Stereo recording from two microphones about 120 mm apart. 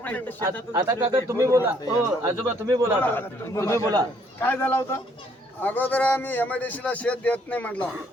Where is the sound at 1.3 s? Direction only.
20° right (ahead or behind).